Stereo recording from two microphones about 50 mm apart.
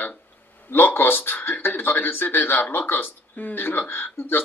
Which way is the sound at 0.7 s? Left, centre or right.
Left.